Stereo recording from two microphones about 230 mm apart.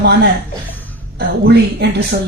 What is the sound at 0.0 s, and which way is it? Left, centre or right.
Speech, right.